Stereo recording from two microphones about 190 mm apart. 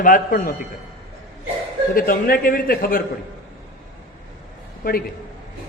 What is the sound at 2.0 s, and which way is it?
A man's voice, 50° left (ahead or behind).